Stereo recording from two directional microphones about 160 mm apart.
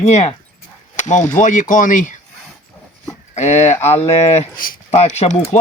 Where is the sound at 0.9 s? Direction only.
50° left (ahead or behind).